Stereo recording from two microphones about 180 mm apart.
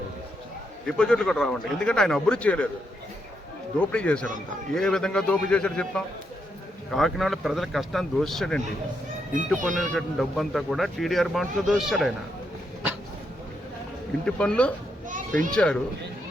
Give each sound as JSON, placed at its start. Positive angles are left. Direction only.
{"t": 0.9, "sound": "speech", "side_deg": 5}
{"t": 3.8, "sound": "a man's voice", "side_deg": 5}
{"t": 9.9, "sound": "speech", "side_deg": 0}
{"t": 14.3, "sound": "speech", "side_deg": 5}
{"t": 15.1, "sound": "children playing", "side_deg": -45}
{"t": 15.5, "sound": "speech", "side_deg": 5}